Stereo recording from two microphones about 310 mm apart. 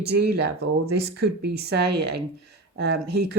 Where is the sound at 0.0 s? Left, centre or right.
Right.